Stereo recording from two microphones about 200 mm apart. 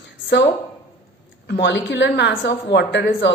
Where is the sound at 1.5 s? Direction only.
60° left (ahead or behind).